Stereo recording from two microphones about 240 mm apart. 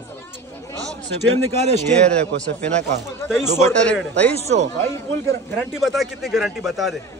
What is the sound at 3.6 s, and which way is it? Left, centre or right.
Speech, centre.